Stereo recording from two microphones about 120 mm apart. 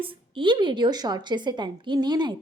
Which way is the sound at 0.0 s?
40° right (ahead or behind).